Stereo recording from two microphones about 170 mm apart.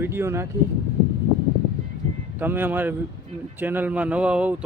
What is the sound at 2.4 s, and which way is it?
Speech, 10° right (ahead or behind).